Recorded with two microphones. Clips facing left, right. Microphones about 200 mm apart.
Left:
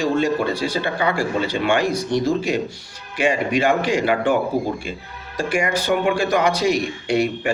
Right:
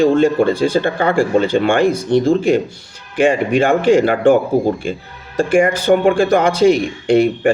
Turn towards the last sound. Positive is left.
turn(degrees=-50)  # may be behind; listen again after turning